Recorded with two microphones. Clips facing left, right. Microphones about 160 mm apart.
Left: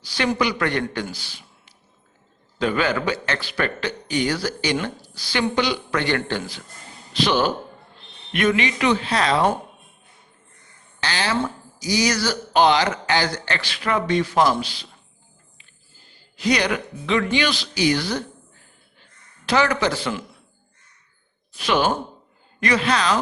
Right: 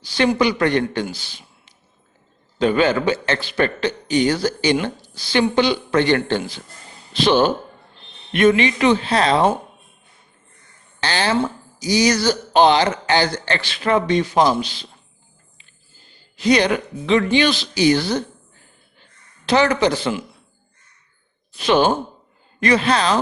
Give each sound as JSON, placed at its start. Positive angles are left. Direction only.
{"t": 0.0, "sound": "a man's voice", "side_deg": -25}
{"t": 1.1, "sound": "a sound", "side_deg": -25}
{"t": 2.6, "sound": "a man's voice", "side_deg": -25}
{"t": 11.0, "sound": "a man's voice", "side_deg": -30}
{"t": 16.4, "sound": "a man's voice", "side_deg": -25}
{"t": 19.5, "sound": "a man's voice", "side_deg": -25}
{"t": 21.6, "sound": "a man's voice", "side_deg": -30}